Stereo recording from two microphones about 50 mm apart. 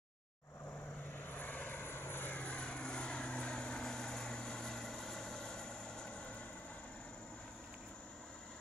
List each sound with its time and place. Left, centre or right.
1.3 s vehicle: left
2.4 s vehicle: left